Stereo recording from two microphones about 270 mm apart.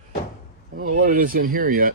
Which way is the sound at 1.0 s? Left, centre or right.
Right.